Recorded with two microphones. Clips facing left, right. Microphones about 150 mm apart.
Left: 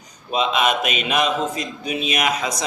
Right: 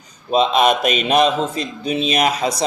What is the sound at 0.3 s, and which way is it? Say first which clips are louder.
Speech: right 5 dB; 35° right (ahead or behind).